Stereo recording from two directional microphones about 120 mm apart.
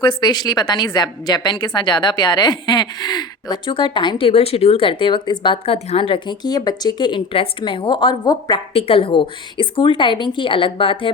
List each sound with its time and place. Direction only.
0.0 s a woman's voice: 40° left (ahead or behind)
8.7 s a woman's voice: 50° left (ahead or behind)